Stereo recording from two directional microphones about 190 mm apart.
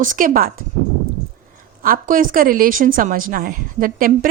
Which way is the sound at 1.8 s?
45° right (ahead or behind).